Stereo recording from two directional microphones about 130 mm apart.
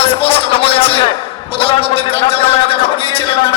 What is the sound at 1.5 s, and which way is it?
Gargling, 45° left (ahead or behind).